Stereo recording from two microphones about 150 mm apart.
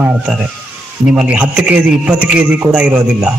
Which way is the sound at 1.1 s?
5° right (ahead or behind).